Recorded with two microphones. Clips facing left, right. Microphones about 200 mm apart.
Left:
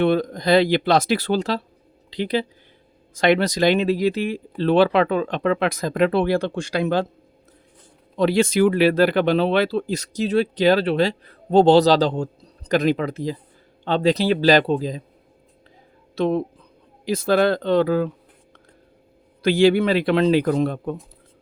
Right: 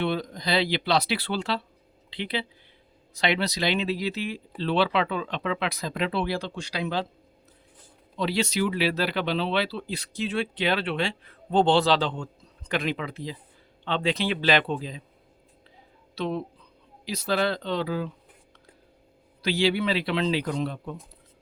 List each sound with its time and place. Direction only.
0.0 s speech: 50° left (ahead or behind)
8.1 s speech: 50° left (ahead or behind)
16.1 s speech: 50° left (ahead or behind)
19.4 s speech: 50° left (ahead or behind)